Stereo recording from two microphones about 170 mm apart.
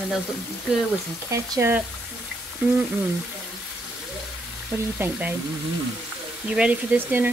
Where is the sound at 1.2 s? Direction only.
20° right (ahead or behind).